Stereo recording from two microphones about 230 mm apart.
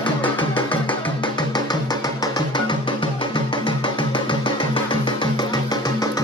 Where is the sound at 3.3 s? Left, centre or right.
Centre.